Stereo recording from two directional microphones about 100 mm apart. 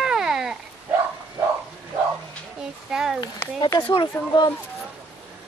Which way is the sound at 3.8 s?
55° left (ahead or behind).